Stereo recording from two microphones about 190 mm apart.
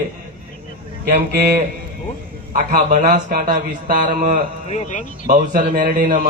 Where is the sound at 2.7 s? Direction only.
45° right (ahead or behind).